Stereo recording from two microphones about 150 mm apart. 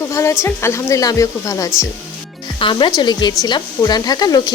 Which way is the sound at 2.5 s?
35° left (ahead or behind).